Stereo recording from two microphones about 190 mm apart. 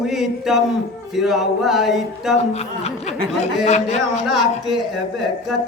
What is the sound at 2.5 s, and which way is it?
Speech, 35° left (ahead or behind).